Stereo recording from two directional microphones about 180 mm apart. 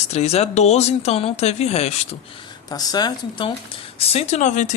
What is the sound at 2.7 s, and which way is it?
Speech, 20° left (ahead or behind).